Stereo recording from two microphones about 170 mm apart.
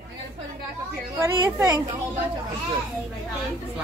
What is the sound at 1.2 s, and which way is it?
Speech, 15° right (ahead or behind).